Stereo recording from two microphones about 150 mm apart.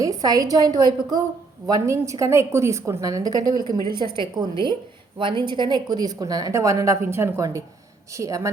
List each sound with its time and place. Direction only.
0.0 s speech: 25° right (ahead or behind)